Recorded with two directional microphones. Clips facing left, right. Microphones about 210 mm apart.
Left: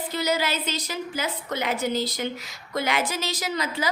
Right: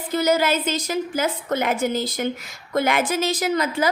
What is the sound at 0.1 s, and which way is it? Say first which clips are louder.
A woman's voice: right 7 dB; 50° right (ahead or behind).